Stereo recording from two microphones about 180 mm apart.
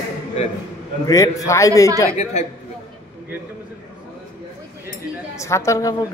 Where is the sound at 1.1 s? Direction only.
15° left (ahead or behind).